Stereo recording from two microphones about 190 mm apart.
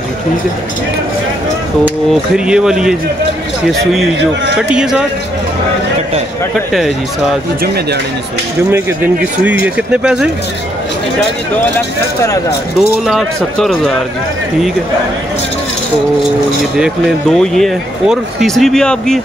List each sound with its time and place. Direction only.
2.3 s speech: 5° right (ahead or behind)
4.6 s speech: 5° right (ahead or behind)
7.6 s speech: 55° right (ahead or behind)
8.7 s speech: 10° right (ahead or behind)
13.0 s speech: centre (ahead or behind)
16.7 s speech: centre (ahead or behind)